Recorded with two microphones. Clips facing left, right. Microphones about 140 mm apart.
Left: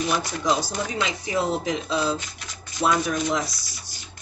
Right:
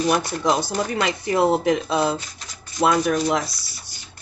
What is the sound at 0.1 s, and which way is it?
Speech, 55° right (ahead or behind).